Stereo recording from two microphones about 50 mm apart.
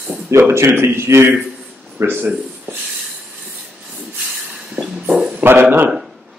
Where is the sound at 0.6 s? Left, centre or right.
Right.